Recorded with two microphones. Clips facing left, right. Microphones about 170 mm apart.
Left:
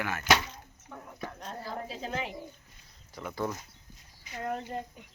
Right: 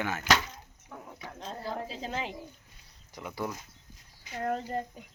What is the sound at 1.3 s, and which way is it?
Speech, 30° right (ahead or behind).